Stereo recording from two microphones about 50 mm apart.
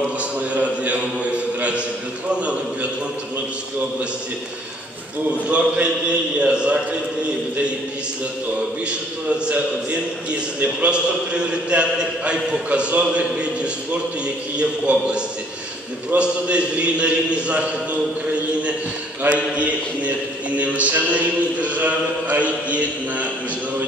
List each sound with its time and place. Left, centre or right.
0.2 s a sound: right
2.3 s a man's voice: right
5.5 s a man's voice: right
10.3 s a man's voice: right
19.2 s a man's voice: right